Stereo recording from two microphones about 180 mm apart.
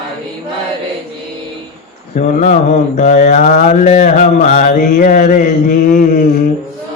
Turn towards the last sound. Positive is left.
turn(degrees=50)  # may be behind; listen again after turning